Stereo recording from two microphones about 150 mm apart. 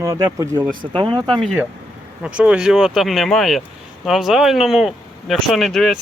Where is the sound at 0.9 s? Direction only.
35° right (ahead or behind).